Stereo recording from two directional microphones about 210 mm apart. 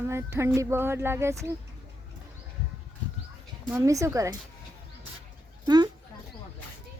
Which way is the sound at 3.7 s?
15° right (ahead or behind).